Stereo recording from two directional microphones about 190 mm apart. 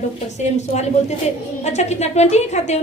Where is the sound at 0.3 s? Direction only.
35° left (ahead or behind).